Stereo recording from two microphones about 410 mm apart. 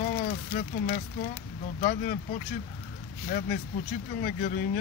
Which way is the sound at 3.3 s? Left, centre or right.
Left.